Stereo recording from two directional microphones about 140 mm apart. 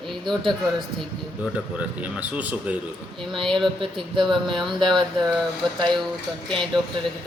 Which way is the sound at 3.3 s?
Centre (ahead or behind).